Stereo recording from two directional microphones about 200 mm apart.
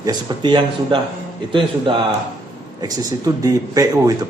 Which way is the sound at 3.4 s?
15° right (ahead or behind).